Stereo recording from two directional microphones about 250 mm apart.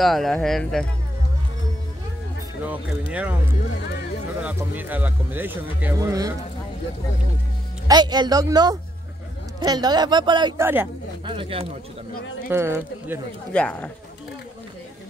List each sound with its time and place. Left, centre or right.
0.0 s speech: centre
2.6 s speech: centre
4.4 s speech: centre
7.9 s speech: centre
11.2 s speech: right
12.4 s speech: centre
13.5 s speech: centre